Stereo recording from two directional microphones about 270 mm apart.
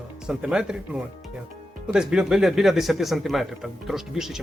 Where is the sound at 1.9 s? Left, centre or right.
Centre.